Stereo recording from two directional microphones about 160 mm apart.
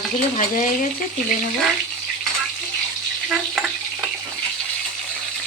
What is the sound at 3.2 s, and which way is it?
Frying, 5° right (ahead or behind).